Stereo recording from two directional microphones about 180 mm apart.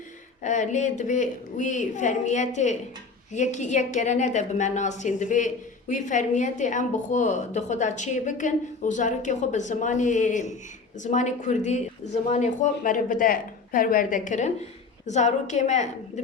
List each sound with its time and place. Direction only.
0.4 s a woman's voice: 40° left (ahead or behind)